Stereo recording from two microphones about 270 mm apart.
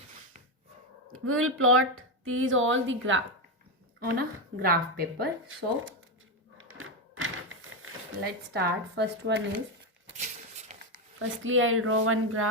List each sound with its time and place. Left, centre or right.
1.1 s speech: right
4.0 s a woman's voice: right
6.6 s a sound: right
7.7 s speech: right
10.2 s a sound: right
11.2 s speech: right